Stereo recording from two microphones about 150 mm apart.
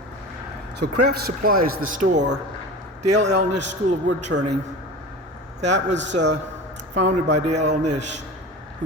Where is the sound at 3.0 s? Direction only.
50° right (ahead or behind).